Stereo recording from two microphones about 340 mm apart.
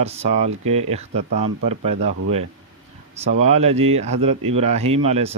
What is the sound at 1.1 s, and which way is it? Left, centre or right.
Speech, right.